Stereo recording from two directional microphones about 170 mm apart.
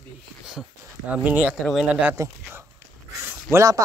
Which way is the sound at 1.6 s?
Centre (ahead or behind).